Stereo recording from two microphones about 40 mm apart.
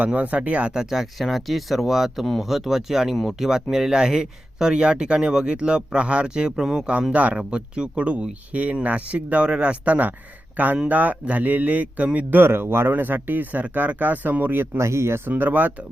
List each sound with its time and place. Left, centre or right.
0.0 s speech: right
0.7 s speech: centre
2.2 s speech: centre
2.5 s speech: centre
7.1 s speech: right
7.3 s speech: right
12.3 s speech: right
12.9 s speech: right
15.4 s speech: right